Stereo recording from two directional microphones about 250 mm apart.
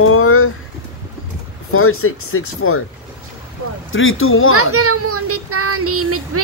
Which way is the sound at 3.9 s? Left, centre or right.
Left.